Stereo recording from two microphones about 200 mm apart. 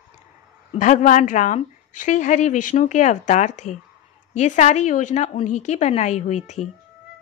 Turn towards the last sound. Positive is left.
turn(degrees=35)  # may be behind; listen again after turning